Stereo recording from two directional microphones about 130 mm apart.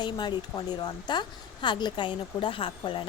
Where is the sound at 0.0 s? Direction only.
35° left (ahead or behind).